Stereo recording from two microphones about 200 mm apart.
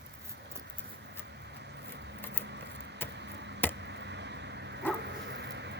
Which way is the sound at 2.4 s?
60° right (ahead or behind).